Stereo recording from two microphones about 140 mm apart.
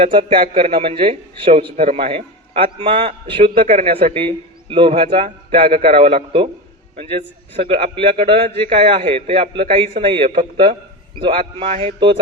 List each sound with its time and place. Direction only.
0.0 s a man's voice: 40° right (ahead or behind)